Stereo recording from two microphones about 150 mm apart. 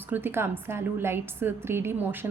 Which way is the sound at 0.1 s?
15° right (ahead or behind).